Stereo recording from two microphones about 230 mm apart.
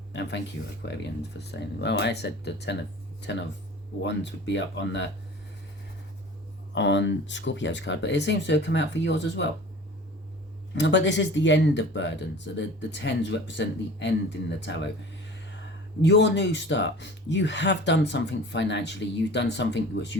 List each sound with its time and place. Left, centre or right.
0.1 s speech: left
6.7 s speech: left
10.8 s speech: left
16.0 s speech: left